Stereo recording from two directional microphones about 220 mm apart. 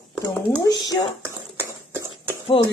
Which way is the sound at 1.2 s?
10° right (ahead or behind).